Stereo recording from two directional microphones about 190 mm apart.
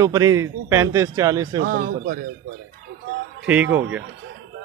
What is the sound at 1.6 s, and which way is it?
Speech, 50° right (ahead or behind).